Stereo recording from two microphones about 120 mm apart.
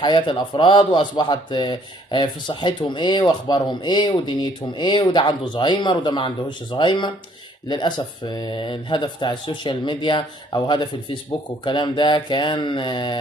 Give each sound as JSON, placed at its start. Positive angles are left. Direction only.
{"t": 0.0, "sound": "speech", "side_deg": 40}